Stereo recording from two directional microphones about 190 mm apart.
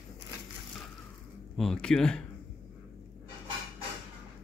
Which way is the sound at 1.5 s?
5° left (ahead or behind).